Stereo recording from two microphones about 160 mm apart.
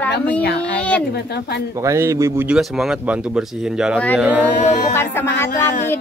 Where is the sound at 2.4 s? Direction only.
5° right (ahead or behind).